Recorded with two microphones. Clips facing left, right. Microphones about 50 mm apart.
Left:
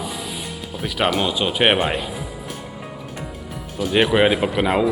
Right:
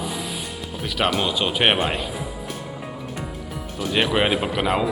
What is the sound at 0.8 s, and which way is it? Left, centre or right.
Speech, centre.